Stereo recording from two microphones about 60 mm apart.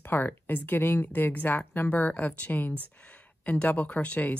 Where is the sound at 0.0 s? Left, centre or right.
Left.